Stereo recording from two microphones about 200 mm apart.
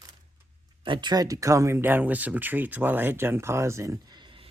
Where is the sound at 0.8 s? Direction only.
25° right (ahead or behind).